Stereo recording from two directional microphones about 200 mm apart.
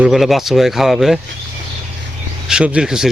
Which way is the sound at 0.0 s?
Centre (ahead or behind).